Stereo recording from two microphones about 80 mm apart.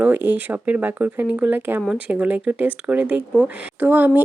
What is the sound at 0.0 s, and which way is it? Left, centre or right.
Speech, right.